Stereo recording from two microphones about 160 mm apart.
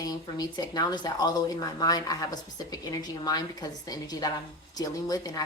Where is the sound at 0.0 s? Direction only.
25° left (ahead or behind).